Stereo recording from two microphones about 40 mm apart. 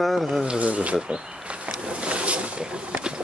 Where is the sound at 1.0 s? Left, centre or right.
Right.